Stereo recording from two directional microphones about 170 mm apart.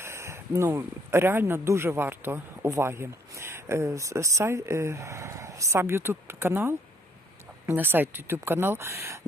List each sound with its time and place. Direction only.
0.0 s speech: 15° right (ahead or behind)